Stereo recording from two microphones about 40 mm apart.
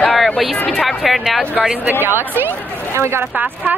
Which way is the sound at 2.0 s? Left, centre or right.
Right.